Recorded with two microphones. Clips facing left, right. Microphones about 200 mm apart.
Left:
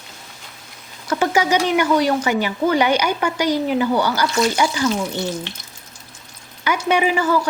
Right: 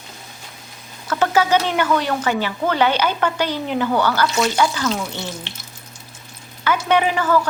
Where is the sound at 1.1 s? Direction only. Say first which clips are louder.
Right 1 dB; 15° left (ahead or behind).